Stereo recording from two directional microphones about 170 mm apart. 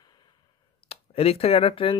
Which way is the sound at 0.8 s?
35° left (ahead or behind).